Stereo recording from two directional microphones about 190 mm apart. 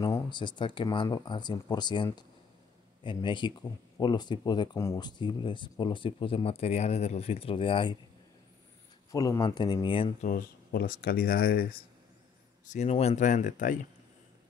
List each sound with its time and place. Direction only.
0.0 s speech: 20° left (ahead or behind)
9.1 s speech: 20° left (ahead or behind)
10.2 s speech: 50° left (ahead or behind)
12.6 s speech: 35° left (ahead or behind)